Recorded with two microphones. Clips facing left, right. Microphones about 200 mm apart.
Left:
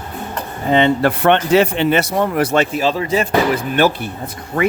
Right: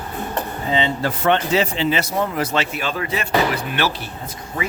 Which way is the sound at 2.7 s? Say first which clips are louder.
Left 7 dB; 35° left (ahead or behind).